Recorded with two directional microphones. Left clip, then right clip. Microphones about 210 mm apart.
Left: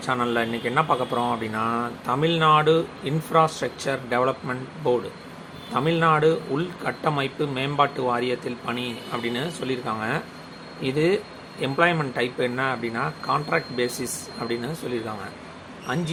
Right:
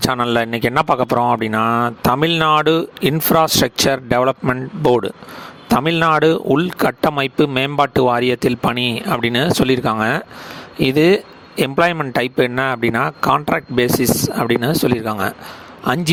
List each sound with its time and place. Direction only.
0.0 s speech: 55° right (ahead or behind)